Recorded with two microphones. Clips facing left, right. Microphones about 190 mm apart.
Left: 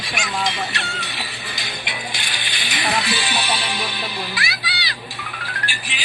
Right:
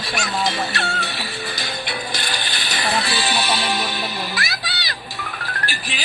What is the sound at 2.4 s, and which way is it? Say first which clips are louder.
Music: right 1 dB; 40° right (ahead or behind).